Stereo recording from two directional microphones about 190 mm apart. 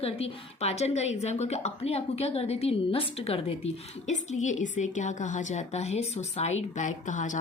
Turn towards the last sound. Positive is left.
turn(degrees=40)  # may be behind; listen again after turning